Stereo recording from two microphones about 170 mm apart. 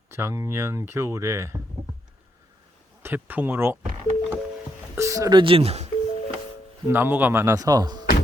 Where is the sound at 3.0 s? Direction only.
10° right (ahead or behind).